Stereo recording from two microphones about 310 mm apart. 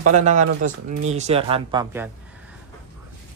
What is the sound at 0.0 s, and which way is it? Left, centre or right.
Speech, right.